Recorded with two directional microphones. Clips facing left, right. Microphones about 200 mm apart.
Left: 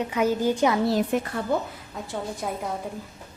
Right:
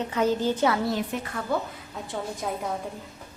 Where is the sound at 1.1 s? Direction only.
50° left (ahead or behind).